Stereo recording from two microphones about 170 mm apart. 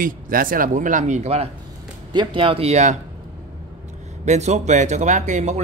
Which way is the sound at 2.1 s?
30° right (ahead or behind).